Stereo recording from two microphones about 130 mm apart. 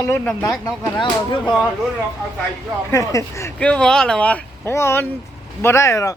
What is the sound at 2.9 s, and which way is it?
Speech, 25° left (ahead or behind).